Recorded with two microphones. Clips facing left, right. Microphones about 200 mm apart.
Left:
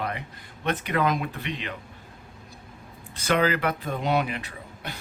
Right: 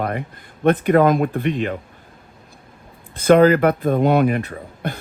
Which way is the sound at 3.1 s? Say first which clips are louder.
Right 12 dB; 50° right (ahead or behind).